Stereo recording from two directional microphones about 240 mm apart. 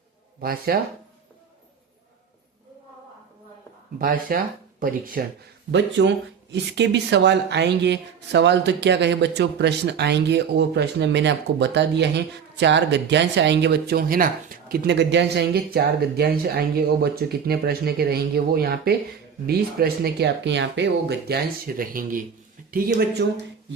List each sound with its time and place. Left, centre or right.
0.4 s speech: right
3.9 s speech: right
5.7 s speech: right